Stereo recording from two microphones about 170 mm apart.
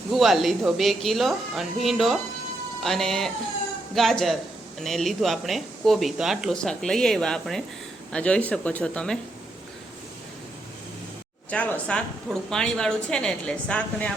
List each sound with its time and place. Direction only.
0.1 s speech: centre (ahead or behind)
11.5 s speech: 5° left (ahead or behind)